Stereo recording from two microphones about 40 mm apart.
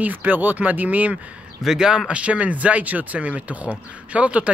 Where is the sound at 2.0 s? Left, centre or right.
Right.